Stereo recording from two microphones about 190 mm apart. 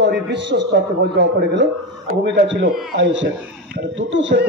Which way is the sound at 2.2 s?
65° right (ahead or behind).